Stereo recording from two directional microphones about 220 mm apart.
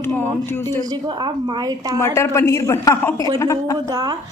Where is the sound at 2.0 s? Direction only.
15° left (ahead or behind).